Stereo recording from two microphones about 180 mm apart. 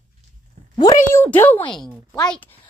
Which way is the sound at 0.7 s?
20° left (ahead or behind).